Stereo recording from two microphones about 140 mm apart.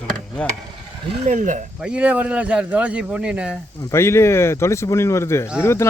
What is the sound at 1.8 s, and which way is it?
Speech, 10° right (ahead or behind).